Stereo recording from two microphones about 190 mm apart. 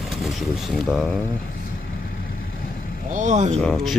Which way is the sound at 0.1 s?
Centre (ahead or behind).